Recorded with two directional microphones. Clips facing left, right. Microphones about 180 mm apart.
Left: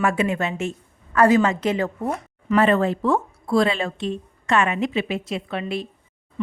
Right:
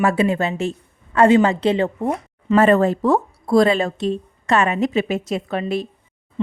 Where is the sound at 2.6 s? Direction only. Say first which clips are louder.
Right 4 dB; 45° right (ahead or behind).